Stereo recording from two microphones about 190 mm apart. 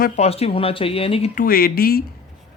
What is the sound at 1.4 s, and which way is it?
Speech, 50° left (ahead or behind).